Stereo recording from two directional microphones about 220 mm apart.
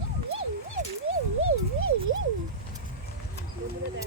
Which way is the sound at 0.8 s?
35° right (ahead or behind).